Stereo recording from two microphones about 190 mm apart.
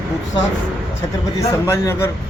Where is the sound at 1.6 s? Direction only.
15° left (ahead or behind).